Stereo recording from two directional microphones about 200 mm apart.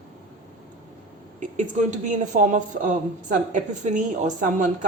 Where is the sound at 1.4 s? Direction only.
40° right (ahead or behind).